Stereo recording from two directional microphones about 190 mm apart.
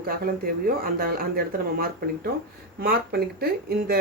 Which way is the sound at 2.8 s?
55° right (ahead or behind).